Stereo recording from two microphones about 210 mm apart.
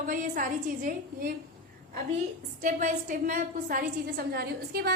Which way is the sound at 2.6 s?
40° right (ahead or behind).